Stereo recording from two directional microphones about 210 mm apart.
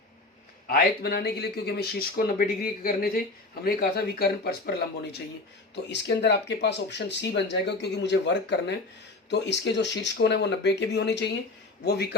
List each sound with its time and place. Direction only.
0.7 s speech: 50° left (ahead or behind)